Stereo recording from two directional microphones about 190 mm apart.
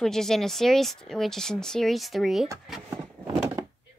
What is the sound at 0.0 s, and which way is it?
Speech, centre (ahead or behind).